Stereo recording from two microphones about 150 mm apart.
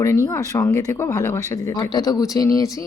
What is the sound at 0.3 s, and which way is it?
Speech, 20° left (ahead or behind).